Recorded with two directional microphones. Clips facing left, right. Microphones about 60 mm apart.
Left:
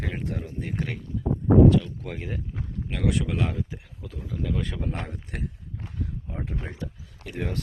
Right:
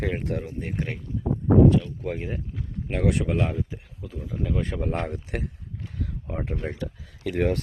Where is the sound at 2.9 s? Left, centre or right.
Right.